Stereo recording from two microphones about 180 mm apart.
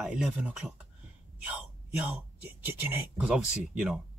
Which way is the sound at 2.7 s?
10° right (ahead or behind).